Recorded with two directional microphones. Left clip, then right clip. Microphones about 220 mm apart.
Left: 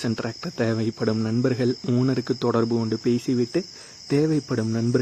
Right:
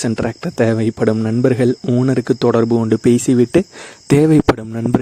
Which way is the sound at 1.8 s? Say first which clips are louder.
Right 8 dB; 20° right (ahead or behind).